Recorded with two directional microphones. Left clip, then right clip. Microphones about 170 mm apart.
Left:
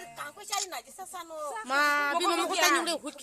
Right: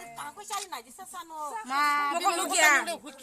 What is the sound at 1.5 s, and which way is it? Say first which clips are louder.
Speech: even; 55° left (ahead or behind).